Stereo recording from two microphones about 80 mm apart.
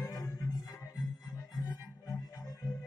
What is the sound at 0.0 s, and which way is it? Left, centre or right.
Music, left.